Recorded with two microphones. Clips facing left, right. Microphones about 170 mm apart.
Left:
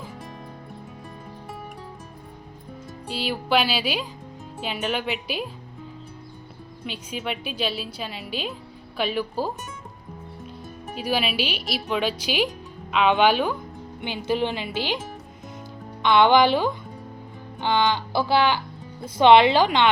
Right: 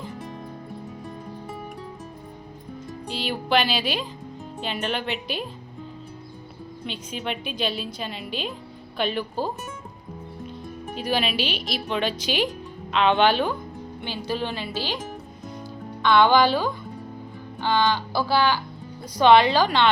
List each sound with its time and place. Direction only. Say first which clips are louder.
0.0 s music: right 3 dB; centre (ahead or behind)
3.1 s a woman's voice: even; 5° left (ahead or behind)
6.8 s a woman's voice: even; 5° left (ahead or behind)
10.8 s speech: even; 5° left (ahead or behind)
16.0 s speech: left 1 dB; 20° left (ahead or behind)